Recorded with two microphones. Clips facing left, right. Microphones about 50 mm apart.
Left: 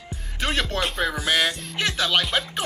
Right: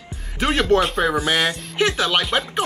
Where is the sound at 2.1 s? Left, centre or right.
Centre.